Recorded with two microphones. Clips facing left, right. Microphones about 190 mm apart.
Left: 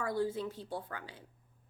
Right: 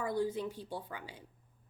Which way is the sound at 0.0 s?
15° right (ahead or behind).